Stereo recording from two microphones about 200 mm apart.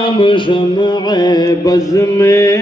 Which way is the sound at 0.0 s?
25° left (ahead or behind).